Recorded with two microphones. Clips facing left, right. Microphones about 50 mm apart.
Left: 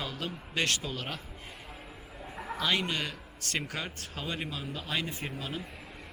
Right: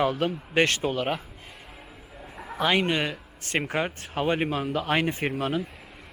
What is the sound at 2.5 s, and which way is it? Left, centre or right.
Speech, right.